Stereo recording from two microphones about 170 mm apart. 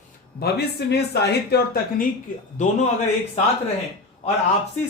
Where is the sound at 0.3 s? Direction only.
70° left (ahead or behind).